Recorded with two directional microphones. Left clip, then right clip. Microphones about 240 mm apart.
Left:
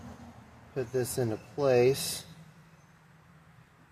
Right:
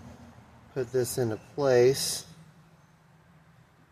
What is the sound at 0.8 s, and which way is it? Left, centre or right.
Speech, right.